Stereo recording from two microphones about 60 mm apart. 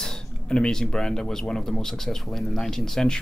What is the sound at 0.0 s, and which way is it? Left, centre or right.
A man's voice, centre.